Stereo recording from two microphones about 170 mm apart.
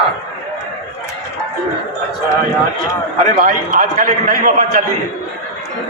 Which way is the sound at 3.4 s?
50° right (ahead or behind).